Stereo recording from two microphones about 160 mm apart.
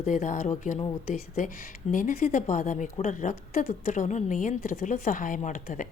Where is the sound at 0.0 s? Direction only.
50° left (ahead or behind).